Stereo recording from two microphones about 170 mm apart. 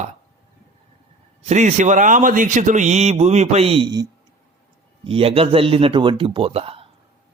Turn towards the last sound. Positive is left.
turn(degrees=-35)  # may be behind; listen again after turning